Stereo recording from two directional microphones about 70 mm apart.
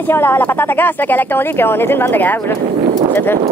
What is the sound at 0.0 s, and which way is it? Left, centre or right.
Speech, left.